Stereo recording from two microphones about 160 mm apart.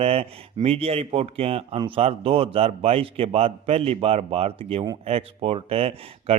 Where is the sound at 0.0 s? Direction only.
40° right (ahead or behind).